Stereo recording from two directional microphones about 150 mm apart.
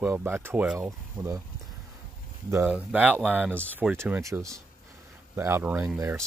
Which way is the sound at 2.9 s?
10° right (ahead or behind).